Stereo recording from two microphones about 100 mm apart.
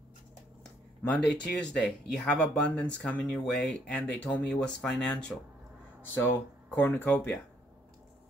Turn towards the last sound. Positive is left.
turn(degrees=20)  # may be behind; listen again after turning